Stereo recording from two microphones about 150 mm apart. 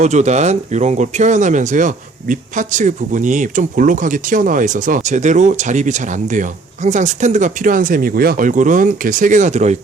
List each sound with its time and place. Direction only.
0.0 s speech: 50° right (ahead or behind)